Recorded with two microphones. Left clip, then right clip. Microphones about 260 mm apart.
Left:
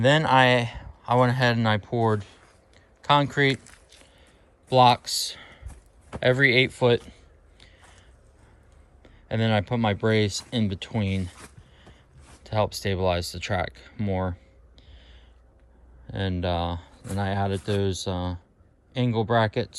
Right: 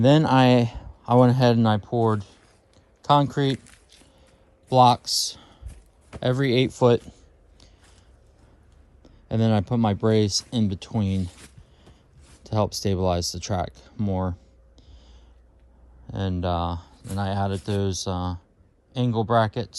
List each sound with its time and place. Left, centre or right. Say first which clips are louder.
0.0 s speech: even; right
2.0 s clicking: right 1 dB; centre
3.0 s speech: even; right
3.6 s a sound: left 1 dB; centre
4.7 s speech: right 1 dB; centre
9.0 s speech: right 1 dB; right
11.3 s a sound: left 2 dB; centre
12.4 s speech: even; right
16.0 s speech: right 1 dB; centre